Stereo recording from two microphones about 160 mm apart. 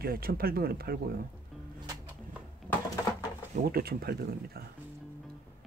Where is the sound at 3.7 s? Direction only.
75° right (ahead or behind).